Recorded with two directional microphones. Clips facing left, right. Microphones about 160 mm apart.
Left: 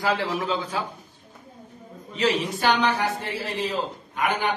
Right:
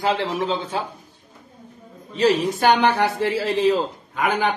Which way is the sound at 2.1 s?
35° right (ahead or behind).